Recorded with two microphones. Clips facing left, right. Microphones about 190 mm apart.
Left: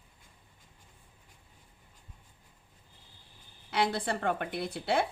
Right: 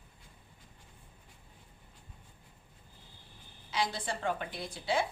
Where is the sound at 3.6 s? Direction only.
60° left (ahead or behind).